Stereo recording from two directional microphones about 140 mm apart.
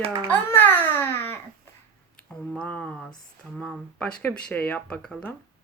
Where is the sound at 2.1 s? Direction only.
5° left (ahead or behind).